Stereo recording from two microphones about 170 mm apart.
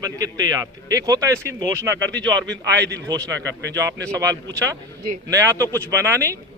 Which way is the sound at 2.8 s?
85° right.